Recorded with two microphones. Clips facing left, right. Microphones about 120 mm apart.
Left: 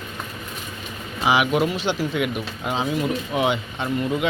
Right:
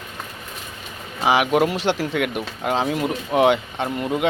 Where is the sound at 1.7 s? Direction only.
75° right (ahead or behind); by 4.3 s 55° right (ahead or behind).